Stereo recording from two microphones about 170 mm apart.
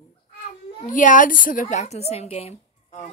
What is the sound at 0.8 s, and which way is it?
A woman's voice, 50° left (ahead or behind).